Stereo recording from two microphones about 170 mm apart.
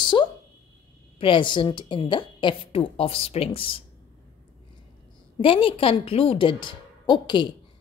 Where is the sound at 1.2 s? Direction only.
30° left (ahead or behind).